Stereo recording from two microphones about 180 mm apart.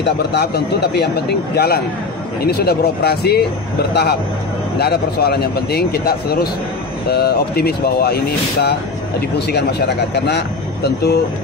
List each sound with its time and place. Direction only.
0.0 s speech: 70° left (ahead or behind)
2.4 s speech: 60° left (ahead or behind)